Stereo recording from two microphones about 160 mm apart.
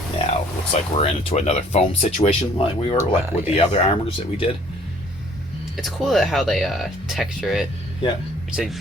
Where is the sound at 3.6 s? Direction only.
40° left (ahead or behind).